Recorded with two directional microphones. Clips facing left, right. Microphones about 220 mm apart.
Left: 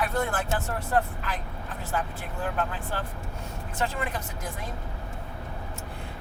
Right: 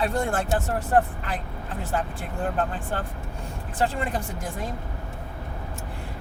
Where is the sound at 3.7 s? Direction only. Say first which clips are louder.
Right 4 dB; 30° right (ahead or behind).